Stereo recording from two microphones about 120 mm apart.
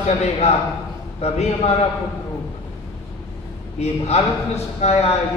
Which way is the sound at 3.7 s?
65° left (ahead or behind).